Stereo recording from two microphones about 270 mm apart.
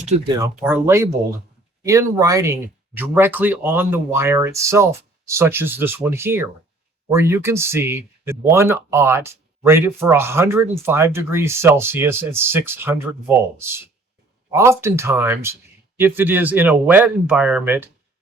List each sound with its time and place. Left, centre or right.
0.0 s speech: right
0.3 s speech: centre